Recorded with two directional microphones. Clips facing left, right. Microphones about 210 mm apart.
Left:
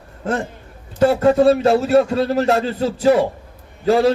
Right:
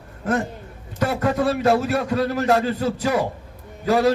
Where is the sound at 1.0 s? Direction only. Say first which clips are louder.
Left 8 dB; 30° left (ahead or behind).